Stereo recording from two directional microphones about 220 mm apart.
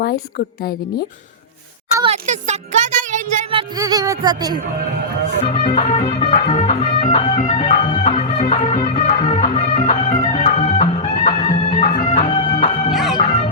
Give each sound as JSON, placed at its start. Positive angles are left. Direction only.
{"t": 0.0, "sound": "a woman's voice", "side_deg": 45}
{"t": 2.2, "sound": "speech", "side_deg": -30}
{"t": 5.5, "sound": "music", "side_deg": 30}
{"t": 12.9, "sound": "music", "side_deg": 0}
{"t": 13.1, "sound": "music", "side_deg": 30}